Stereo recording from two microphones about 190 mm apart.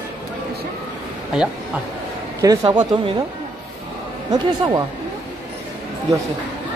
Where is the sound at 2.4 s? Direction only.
20° right (ahead or behind).